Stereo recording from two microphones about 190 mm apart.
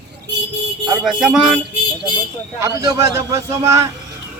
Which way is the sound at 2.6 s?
15° right (ahead or behind).